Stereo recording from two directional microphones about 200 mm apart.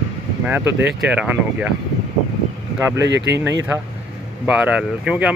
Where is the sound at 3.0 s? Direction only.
60° right (ahead or behind).